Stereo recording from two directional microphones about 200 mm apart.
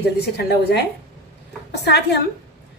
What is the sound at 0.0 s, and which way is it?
Speech, 55° left (ahead or behind).